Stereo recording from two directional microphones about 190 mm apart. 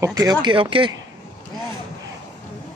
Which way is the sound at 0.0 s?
20° right (ahead or behind).